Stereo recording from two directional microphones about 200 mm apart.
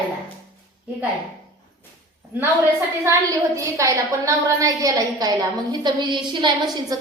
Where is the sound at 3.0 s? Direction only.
15° right (ahead or behind).